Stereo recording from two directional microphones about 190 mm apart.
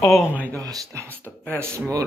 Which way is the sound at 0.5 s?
15° right (ahead or behind).